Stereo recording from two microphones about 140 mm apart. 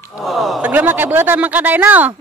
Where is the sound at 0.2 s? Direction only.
Centre (ahead or behind).